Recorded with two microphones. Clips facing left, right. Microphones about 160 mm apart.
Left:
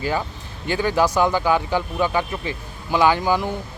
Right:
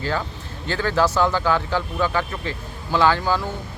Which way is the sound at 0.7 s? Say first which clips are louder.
Left 1 dB; 15° left (ahead or behind).